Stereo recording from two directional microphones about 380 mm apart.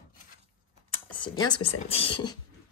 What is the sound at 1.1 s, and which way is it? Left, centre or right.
Speech, centre.